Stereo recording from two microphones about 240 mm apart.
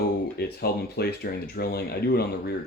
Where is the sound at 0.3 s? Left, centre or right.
Left.